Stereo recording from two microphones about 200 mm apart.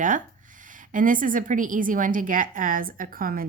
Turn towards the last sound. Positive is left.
turn(degrees=-45)  # may be behind; listen again after turning